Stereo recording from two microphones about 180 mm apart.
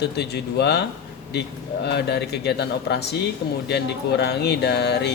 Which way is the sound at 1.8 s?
65° left (ahead or behind).